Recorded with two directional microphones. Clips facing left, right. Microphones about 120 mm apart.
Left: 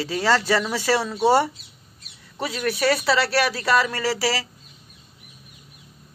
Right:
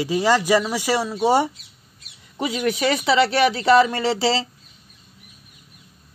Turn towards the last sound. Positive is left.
turn(degrees=-25)  # may be behind; listen again after turning